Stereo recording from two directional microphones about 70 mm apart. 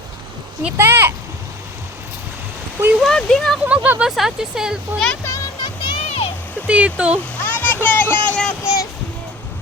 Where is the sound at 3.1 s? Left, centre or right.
Centre.